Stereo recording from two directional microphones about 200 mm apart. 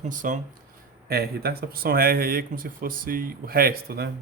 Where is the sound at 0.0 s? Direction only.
40° right (ahead or behind).